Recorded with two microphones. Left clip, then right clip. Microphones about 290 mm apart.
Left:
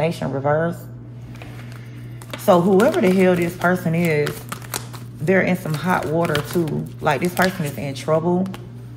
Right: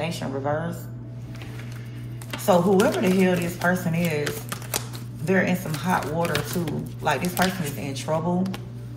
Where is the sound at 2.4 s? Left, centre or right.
Left.